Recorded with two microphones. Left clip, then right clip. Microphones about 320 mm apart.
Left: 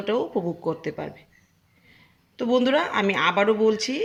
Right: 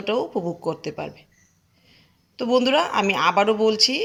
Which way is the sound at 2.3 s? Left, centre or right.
Centre.